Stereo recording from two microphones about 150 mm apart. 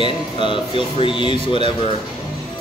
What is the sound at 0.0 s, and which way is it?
Speech, 35° left (ahead or behind).